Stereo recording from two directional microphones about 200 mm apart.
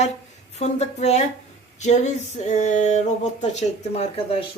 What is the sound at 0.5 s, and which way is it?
Speech, 35° left (ahead or behind).